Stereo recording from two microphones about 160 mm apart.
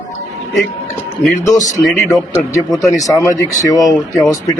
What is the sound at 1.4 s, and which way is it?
A man's voice, 20° left (ahead or behind).